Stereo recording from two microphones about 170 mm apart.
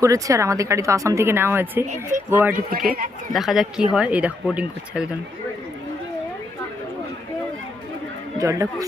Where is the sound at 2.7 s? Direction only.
55° right (ahead or behind).